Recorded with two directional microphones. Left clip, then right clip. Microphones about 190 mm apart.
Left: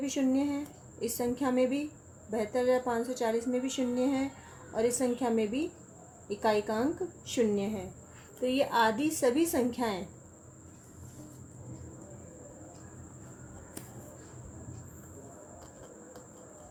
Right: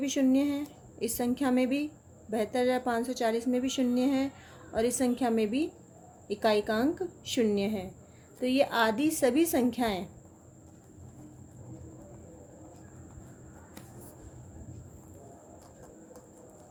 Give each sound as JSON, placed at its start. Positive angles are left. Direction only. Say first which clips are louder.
{"t": 0.0, "sound": "a woman's voice", "louder": "right 3 dB", "side_deg": -45}